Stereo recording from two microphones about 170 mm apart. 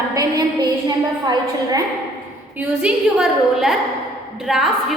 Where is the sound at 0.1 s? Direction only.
20° right (ahead or behind).